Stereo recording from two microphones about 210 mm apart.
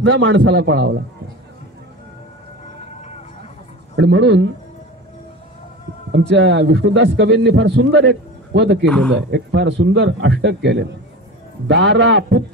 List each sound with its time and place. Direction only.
0.0 s a man's voice: 60° right (ahead or behind)
3.9 s a man's voice: 60° right (ahead or behind)
6.1 s a man's voice: 55° right (ahead or behind)
8.8 s speech: 5° left (ahead or behind)
9.1 s a man's voice: 60° right (ahead or behind)